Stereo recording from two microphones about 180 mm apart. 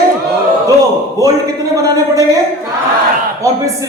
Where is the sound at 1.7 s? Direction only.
20° right (ahead or behind).